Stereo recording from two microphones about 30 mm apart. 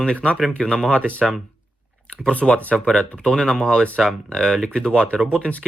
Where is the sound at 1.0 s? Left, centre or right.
Left.